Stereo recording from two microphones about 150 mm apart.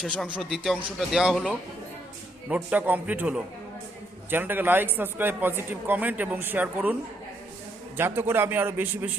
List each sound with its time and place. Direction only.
0.0 s speech: centre (ahead or behind)
7.9 s speech: 15° right (ahead or behind)